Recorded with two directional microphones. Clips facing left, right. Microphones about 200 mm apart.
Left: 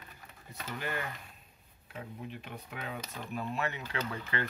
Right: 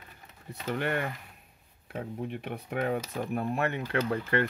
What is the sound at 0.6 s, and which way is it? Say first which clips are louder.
Speech: right 8 dB; 60° right (ahead or behind).